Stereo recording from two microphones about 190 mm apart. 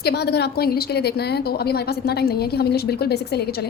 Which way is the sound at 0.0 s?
60° left (ahead or behind).